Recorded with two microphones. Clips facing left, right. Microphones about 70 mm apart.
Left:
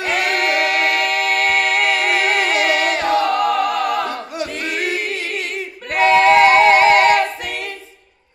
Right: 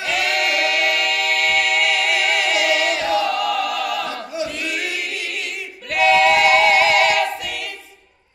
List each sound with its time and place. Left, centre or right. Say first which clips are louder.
0.0 s music: left 2 dB; left
5.9 s a capella: left 3 dB; left